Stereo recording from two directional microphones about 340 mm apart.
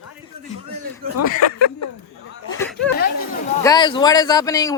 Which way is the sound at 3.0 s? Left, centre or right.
Left.